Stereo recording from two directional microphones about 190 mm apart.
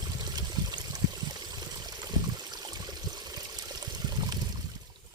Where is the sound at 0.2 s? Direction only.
20° right (ahead or behind).